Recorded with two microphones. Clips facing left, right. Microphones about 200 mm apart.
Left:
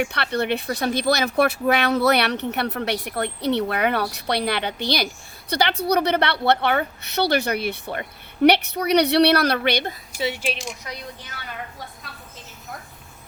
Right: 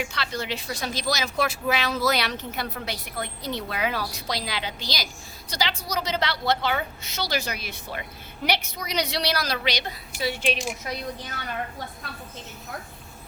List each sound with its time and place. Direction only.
0.0 s speech: 65° left (ahead or behind)
10.2 s speech: 20° left (ahead or behind)
10.4 s speech: centre (ahead or behind)